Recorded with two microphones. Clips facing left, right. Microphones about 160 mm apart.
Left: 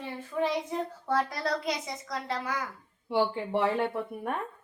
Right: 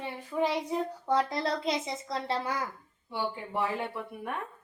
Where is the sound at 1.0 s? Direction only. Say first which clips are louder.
Right 1 dB; 20° right (ahead or behind).